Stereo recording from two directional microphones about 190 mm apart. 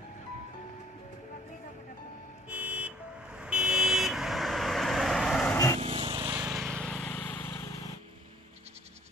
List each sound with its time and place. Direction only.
2.5 s vehicle: 5° right (ahead or behind)
5.8 s vehicle: 30° right (ahead or behind)
6.2 s vehicle: 10° right (ahead or behind); by 7.5 s 10° left (ahead or behind)